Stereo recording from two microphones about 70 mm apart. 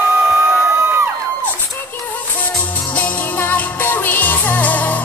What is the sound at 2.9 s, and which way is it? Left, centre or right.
Music, left.